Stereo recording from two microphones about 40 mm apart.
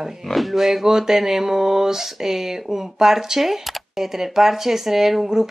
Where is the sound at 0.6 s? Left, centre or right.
Centre.